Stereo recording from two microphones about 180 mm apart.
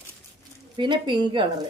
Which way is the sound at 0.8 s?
25° right (ahead or behind).